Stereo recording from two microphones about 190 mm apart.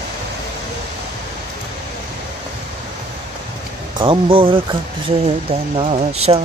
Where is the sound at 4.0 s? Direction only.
30° right (ahead or behind).